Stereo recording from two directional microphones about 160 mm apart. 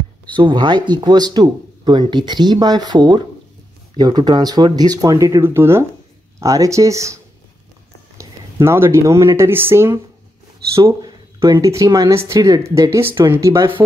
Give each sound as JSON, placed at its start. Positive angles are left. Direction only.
{"t": 0.3, "sound": "speech", "side_deg": -30}
{"t": 8.2, "sound": "speech", "side_deg": -15}